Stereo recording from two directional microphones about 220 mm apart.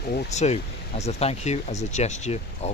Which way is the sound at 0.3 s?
30° left (ahead or behind).